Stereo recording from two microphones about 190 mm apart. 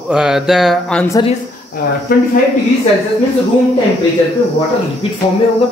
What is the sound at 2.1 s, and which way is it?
Speech, 50° left (ahead or behind).